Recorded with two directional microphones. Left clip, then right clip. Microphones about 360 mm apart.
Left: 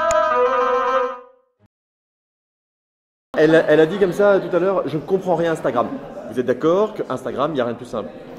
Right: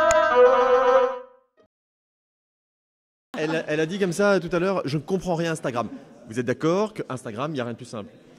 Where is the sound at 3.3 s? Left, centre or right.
Right.